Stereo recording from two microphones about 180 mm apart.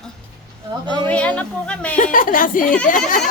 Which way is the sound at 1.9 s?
50° left (ahead or behind).